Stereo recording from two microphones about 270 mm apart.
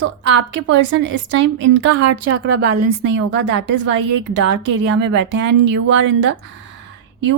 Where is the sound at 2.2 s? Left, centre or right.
Right.